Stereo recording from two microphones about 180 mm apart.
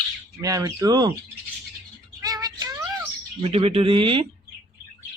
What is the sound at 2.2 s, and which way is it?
Music, 20° right (ahead or behind).